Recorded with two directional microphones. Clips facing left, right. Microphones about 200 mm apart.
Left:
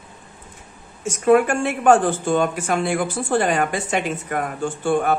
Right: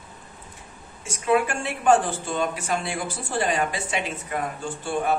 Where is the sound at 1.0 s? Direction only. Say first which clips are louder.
Left 7 dB; 50° left (ahead or behind).